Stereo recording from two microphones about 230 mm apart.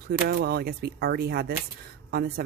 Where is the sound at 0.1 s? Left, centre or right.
Right.